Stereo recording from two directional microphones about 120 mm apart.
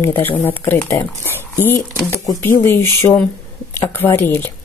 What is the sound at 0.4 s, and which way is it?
Speech, 15° left (ahead or behind).